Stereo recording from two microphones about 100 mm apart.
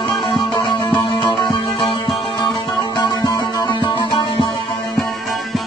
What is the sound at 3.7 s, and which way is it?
Music, 55° left (ahead or behind).